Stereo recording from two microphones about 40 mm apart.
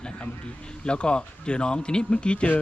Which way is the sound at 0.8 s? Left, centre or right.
Left.